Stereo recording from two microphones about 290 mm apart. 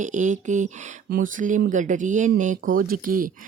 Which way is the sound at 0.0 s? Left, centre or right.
Right.